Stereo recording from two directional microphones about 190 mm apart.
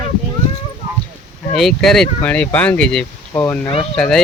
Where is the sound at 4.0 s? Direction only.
Centre (ahead or behind).